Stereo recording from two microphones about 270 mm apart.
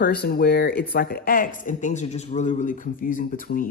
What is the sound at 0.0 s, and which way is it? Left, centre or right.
Speech, left.